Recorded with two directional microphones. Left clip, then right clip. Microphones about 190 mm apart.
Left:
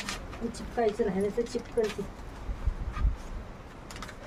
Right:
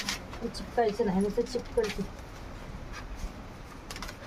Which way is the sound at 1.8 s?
25° left (ahead or behind).